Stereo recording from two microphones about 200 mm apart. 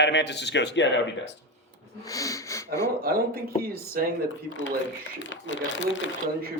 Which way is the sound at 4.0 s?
45° right (ahead or behind).